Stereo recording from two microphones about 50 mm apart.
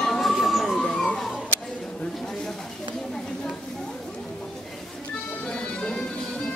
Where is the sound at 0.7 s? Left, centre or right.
Centre.